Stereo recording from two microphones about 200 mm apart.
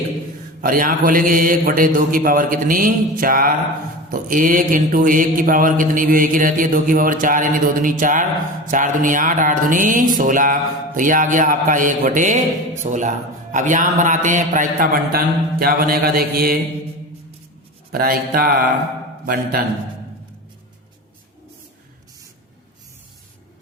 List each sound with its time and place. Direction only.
0.6 s a man's voice: 45° right (ahead or behind)
17.9 s a man's voice: 45° right (ahead or behind)